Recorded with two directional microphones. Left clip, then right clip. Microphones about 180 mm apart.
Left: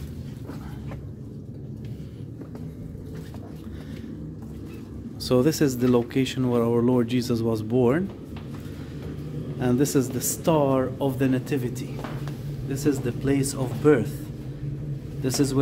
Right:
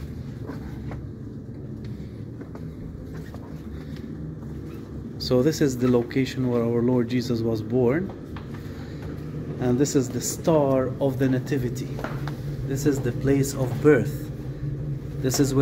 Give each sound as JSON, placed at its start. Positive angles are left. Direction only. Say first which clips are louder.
{"t": 5.2, "sound": "speech", "louder": "even", "side_deg": 20}
{"t": 9.6, "sound": "speech", "louder": "even", "side_deg": 15}
{"t": 15.2, "sound": "speech", "louder": "right 1 dB", "side_deg": 0}